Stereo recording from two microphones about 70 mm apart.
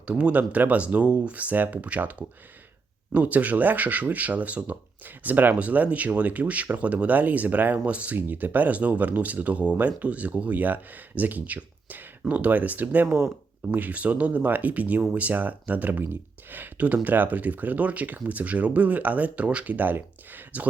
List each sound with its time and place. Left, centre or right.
0.1 s speech: centre